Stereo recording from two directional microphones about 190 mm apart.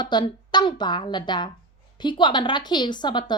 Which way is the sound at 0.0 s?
25° left (ahead or behind).